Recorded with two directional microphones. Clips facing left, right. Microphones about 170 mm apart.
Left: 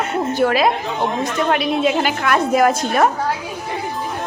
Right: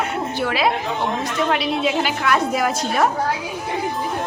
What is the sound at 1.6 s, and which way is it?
A woman's voice, 50° left (ahead or behind).